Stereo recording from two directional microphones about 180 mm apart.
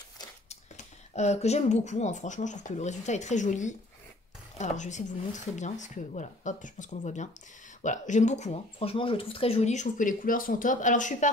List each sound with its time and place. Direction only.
1.1 s speech: 40° left (ahead or behind)